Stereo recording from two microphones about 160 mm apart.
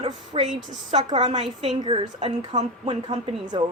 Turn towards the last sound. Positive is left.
turn(degrees=-35)  # may be behind; listen again after turning